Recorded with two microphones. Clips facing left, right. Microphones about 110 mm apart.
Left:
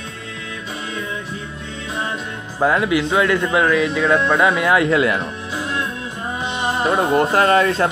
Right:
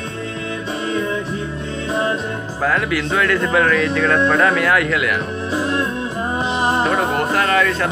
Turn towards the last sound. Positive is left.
turn(degrees=30)  # may be behind; listen again after turning